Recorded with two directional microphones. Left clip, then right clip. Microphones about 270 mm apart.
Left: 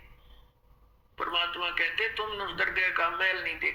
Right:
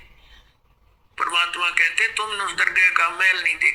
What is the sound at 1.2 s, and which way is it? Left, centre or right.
A man's voice, centre.